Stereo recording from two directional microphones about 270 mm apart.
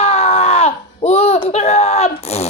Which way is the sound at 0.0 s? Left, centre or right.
Left.